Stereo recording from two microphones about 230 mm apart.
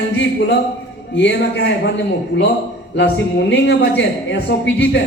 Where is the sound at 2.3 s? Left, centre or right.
Left.